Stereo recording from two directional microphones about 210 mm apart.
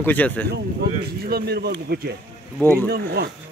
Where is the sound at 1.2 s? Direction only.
50° right (ahead or behind).